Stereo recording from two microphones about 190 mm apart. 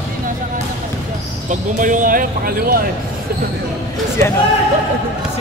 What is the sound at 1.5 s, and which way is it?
Basketball bounce, 45° right (ahead or behind).